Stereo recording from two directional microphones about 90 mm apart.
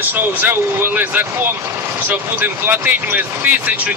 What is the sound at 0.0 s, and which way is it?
Speech, 20° right (ahead or behind).